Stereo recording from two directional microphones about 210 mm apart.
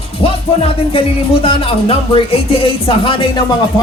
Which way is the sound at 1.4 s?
25° left (ahead or behind).